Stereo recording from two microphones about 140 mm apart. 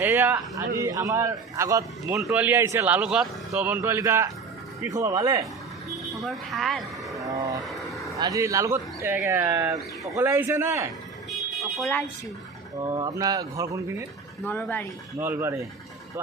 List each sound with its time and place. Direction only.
0.0 s speech: 15° right (ahead or behind)
0.8 s speech: 25° right (ahead or behind)
6.2 s speech: centre (ahead or behind)
7.3 s speech: 25° right (ahead or behind)
7.6 s vehicle: centre (ahead or behind)
8.2 s speech: 25° right (ahead or behind)
11.3 s car alarm: centre (ahead or behind)
13.0 s speech: 25° right (ahead or behind)
14.4 s speech: 10° left (ahead or behind)
15.2 s speech: 15° right (ahead or behind)